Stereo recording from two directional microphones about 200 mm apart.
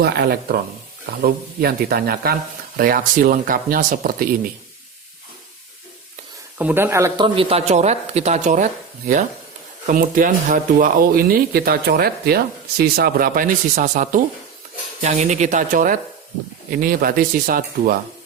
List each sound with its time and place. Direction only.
0.0 s speech: 50° right (ahead or behind)
6.6 s speech: 10° right (ahead or behind)
7.3 s speech: 30° right (ahead or behind)